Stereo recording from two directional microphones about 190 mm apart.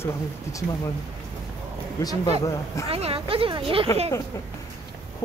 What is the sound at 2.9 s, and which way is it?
Speech, 30° right (ahead or behind).